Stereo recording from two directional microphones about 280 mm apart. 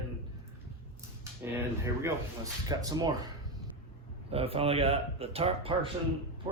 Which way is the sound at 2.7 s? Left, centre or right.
Centre.